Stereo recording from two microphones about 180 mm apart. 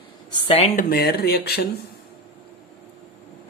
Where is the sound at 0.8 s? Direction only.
60° left (ahead or behind).